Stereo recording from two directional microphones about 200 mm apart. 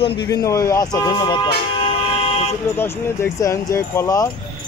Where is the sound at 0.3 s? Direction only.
15° left (ahead or behind).